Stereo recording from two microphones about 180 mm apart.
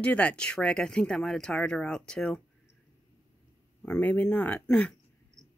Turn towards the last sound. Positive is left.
turn(degrees=5)  # may be behind; listen again after turning